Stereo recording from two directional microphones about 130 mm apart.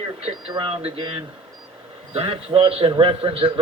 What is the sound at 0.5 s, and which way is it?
A man's voice, 45° right (ahead or behind).